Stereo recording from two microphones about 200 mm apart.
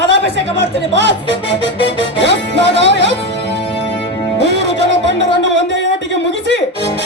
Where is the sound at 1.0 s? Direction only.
60° left (ahead or behind).